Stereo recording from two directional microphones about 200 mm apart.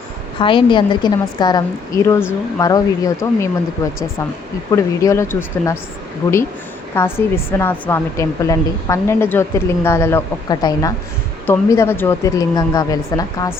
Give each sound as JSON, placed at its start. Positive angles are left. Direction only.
{"t": 0.3, "sound": "a woman's voice", "side_deg": 25}
{"t": 4.7, "sound": "a woman's voice", "side_deg": 15}
{"t": 6.9, "sound": "a woman's voice", "side_deg": 10}